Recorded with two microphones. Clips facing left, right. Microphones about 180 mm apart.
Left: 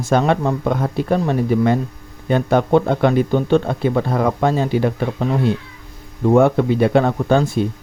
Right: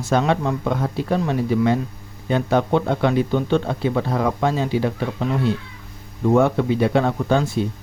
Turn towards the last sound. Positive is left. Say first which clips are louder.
# left 3 dB
turn(degrees=55)  # may be behind; listen again after turning